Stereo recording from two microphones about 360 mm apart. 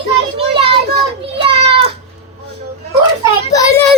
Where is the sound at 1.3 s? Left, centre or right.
Centre.